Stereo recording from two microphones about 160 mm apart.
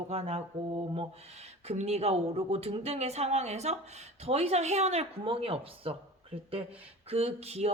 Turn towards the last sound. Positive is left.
turn(degrees=-40)  # may be behind; listen again after turning